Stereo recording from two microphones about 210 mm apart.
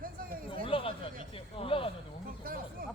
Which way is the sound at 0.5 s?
25° left (ahead or behind).